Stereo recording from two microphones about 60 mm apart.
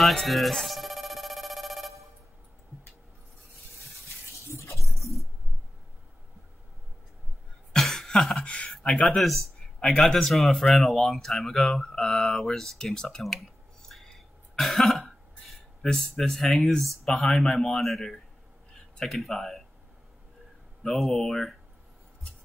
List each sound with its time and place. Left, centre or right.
0.0 s music: centre
4.6 s a sound: centre
7.7 s cough: centre
8.5 s a sound: centre
8.7 s speech: centre
14.6 s cough: centre
15.8 s speech: centre
20.8 s speech: centre